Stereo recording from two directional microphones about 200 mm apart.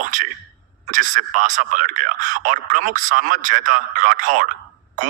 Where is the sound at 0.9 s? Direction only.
40° right (ahead or behind).